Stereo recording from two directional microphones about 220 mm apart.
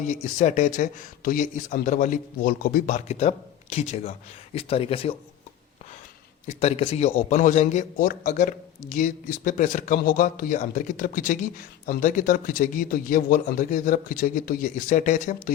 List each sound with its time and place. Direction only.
0.0 s a man's voice: 35° left (ahead or behind)
6.6 s a man's voice: 30° left (ahead or behind)